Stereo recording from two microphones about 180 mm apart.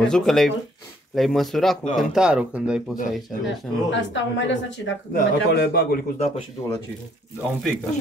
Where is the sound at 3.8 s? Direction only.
90° left.